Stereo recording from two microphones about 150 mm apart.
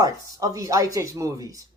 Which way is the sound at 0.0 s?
25° right (ahead or behind).